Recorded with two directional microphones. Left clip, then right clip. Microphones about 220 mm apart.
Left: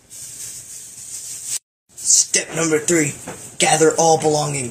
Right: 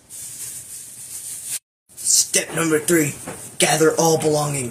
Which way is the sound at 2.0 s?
15° right (ahead or behind).